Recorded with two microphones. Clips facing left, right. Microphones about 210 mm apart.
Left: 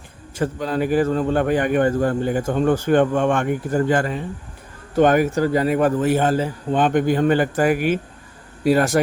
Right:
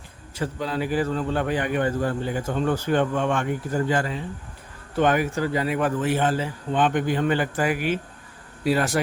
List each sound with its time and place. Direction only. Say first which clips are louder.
0.3 s a man's voice: left 5 dB; 50° left (ahead or behind)